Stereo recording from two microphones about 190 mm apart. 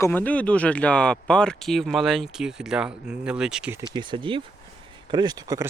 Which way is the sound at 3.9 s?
25° right (ahead or behind).